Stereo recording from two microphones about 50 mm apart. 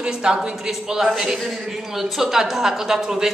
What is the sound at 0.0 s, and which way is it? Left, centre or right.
A woman's voice, centre.